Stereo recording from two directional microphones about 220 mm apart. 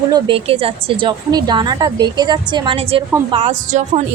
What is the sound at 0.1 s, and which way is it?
A woman's voice, 25° right (ahead or behind).